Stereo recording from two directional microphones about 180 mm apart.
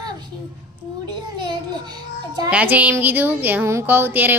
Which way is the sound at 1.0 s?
25° right (ahead or behind).